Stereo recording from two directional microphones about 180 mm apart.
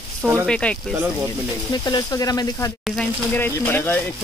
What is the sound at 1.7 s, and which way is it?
Speech, 25° left (ahead or behind).